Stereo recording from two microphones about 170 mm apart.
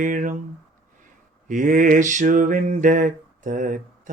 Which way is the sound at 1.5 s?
50° right (ahead or behind).